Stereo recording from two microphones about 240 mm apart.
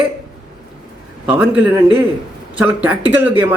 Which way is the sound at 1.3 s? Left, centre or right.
Centre.